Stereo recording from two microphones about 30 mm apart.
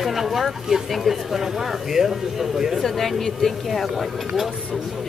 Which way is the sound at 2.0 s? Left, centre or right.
Right.